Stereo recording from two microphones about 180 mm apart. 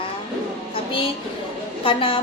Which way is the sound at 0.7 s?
30° left (ahead or behind).